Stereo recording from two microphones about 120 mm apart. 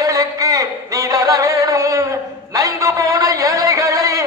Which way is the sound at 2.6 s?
25° right (ahead or behind).